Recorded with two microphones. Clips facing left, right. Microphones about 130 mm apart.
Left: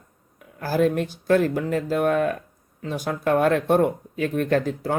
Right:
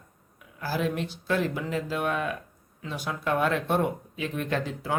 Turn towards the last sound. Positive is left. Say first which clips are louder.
# left 8 dB
turn(degrees=45)  # may be behind; listen again after turning